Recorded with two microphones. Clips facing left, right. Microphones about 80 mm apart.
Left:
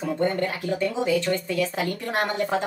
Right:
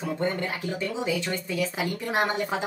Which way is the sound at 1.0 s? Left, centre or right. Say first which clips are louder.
Left 5 dB; centre.